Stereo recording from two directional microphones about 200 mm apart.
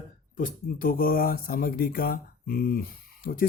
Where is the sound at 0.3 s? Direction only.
45° left (ahead or behind).